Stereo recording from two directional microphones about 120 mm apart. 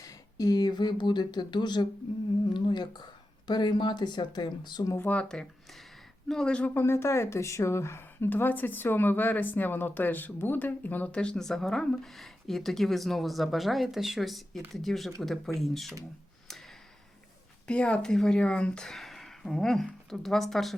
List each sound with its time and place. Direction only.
0.0 s speech: 30° left (ahead or behind)
4.9 s speech: 10° left (ahead or behind)
16.5 s tick-tock: centre (ahead or behind)
17.7 s speech: 10° left (ahead or behind)